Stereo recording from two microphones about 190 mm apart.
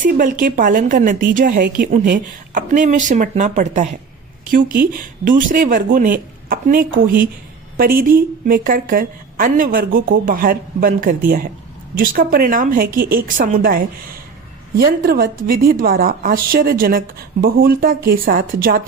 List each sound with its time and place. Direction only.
0.0 s a woman's voice: 45° right (ahead or behind)